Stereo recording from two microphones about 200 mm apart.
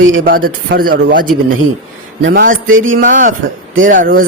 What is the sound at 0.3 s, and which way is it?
Speech, 45° right (ahead or behind).